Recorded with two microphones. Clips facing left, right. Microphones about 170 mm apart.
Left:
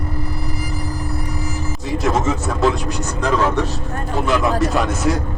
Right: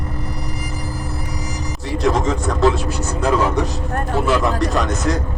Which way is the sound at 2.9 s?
15° left (ahead or behind).